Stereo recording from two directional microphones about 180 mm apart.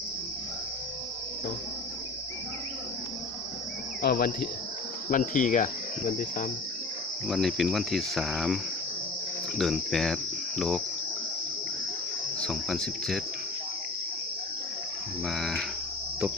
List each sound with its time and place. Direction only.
4.0 s cricket: 55° left (ahead or behind)
5.0 s speech: 45° left (ahead or behind)
7.3 s speech: centre (ahead or behind)
9.6 s speech: centre (ahead or behind)
12.4 s speech: centre (ahead or behind)
15.3 s speech: centre (ahead or behind)